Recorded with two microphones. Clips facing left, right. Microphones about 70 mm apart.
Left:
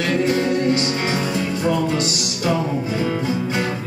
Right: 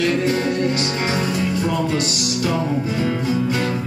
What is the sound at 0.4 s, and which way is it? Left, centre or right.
Music, left.